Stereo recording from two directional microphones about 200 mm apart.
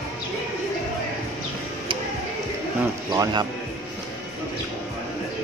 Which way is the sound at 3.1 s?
20° right (ahead or behind).